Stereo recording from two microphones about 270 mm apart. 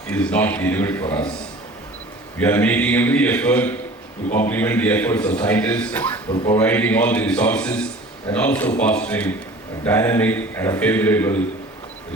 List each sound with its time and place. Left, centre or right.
0.1 s a man's voice: centre
2.4 s a man's voice: centre